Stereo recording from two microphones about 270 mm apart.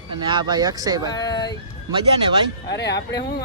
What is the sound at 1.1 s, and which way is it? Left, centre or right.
Speech, centre.